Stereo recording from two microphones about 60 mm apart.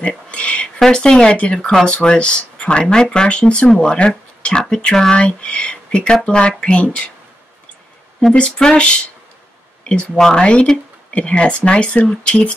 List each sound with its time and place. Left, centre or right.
0.3 s a sound: centre
0.7 s speech: centre
8.5 s speech: centre